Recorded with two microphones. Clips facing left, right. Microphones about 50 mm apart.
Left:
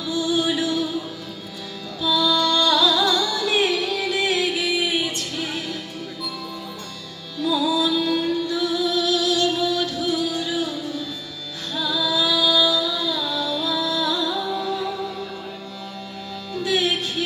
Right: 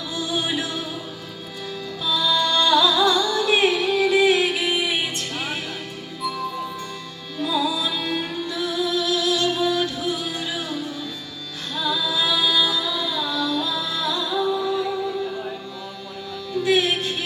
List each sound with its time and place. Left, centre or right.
0.1 s music: right
2.0 s music: right
7.4 s music: right
11.9 s music: right
16.6 s music: right